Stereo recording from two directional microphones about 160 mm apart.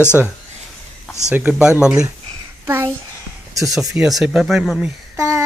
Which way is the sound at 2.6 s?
15° right (ahead or behind).